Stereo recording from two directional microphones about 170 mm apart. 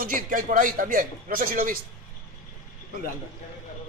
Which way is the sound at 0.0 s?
55° right (ahead or behind).